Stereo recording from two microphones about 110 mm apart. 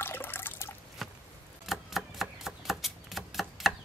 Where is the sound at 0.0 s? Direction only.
20° left (ahead or behind).